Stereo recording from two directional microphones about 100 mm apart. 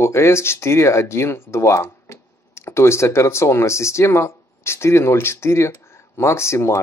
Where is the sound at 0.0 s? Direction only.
25° left (ahead or behind).